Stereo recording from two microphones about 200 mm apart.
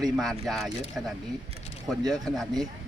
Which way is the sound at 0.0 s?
Centre (ahead or behind).